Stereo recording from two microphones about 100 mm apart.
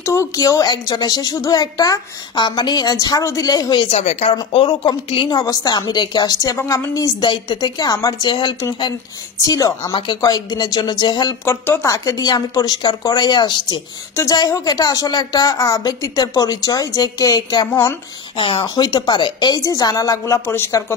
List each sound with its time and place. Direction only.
0.0 s a woman's voice: 30° left (ahead or behind)
3.8 s speech: 85° left
4.5 s speech: 65° left (ahead or behind)
5.4 s a woman's voice: 40° left (ahead or behind)
7.2 s a woman's voice: 50° left (ahead or behind)
9.5 s a woman's voice: 35° left (ahead or behind)
11.4 s speech: 25° left (ahead or behind)
11.9 s a woman's voice: 35° left (ahead or behind)
18.4 s speech: 60° left (ahead or behind)
18.8 s a woman's voice: 45° left (ahead or behind)
19.6 s a woman's voice: 35° left (ahead or behind)
20.4 s speech: 20° left (ahead or behind)